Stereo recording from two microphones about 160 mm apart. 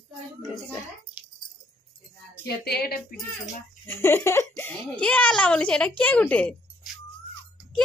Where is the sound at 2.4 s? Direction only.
85° left.